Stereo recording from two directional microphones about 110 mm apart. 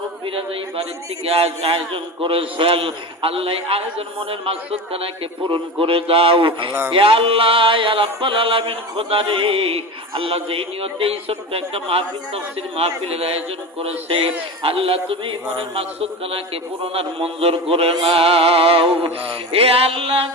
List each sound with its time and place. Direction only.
0.3 s a man's voice: 60° right (ahead or behind)